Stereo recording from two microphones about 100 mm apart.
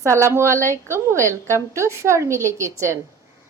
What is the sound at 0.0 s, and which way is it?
A woman's voice, 30° right (ahead or behind).